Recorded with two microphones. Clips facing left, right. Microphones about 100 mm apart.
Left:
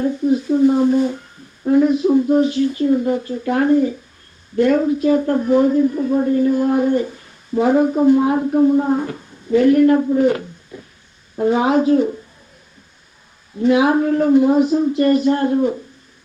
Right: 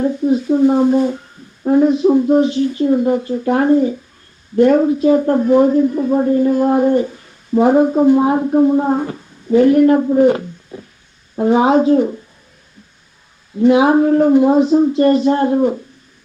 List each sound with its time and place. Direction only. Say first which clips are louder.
0.0 s speech: right 2 dB; 20° right (ahead or behind)
1.6 s speech: right 2 dB; 25° right (ahead or behind)
13.7 s speech: right 4 dB; 25° right (ahead or behind)